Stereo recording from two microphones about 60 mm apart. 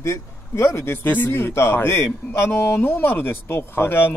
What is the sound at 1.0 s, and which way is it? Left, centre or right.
A man's voice, left.